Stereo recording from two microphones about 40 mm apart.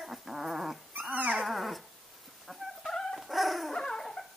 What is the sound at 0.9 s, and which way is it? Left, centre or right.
Dog, right.